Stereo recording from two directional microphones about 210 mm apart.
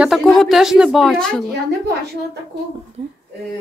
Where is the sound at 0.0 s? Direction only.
Centre (ahead or behind).